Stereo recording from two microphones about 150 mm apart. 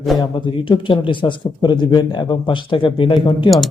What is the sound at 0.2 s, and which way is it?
A man's voice, 30° left (ahead or behind).